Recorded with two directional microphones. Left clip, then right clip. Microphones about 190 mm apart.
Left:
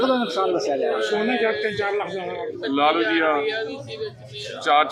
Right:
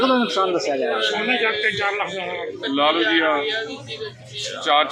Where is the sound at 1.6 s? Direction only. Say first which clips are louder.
Right 3 dB; 55° left (ahead or behind).